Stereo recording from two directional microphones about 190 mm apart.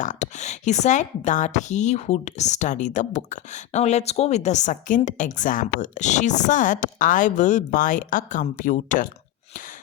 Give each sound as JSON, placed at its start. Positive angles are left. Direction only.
{"t": 0.0, "sound": "speech", "side_deg": 40}